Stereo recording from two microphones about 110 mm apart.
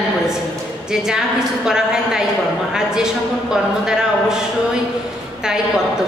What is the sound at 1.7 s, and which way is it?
A woman's voice, 5° right (ahead or behind).